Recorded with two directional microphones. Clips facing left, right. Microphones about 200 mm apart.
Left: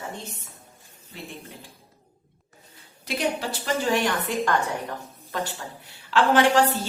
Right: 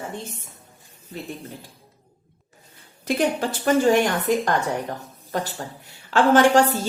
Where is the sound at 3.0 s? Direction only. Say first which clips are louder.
Right 5 dB; 50° right (ahead or behind).